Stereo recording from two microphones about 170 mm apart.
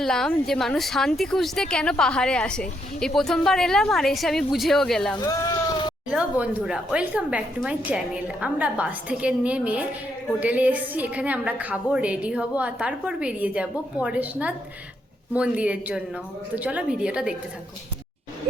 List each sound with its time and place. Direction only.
0.0 s speech: 5° left (ahead or behind)
5.1 s a sound: 20° left (ahead or behind)
6.1 s a woman's voice: 5° right (ahead or behind)